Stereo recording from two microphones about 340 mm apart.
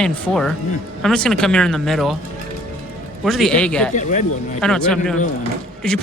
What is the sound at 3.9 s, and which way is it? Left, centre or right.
Speech, left.